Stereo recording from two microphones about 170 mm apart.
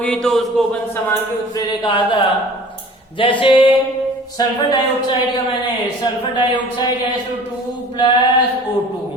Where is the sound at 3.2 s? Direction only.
30° left (ahead or behind).